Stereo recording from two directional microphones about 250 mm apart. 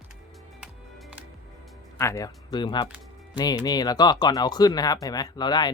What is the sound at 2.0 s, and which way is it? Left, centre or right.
Speech, centre.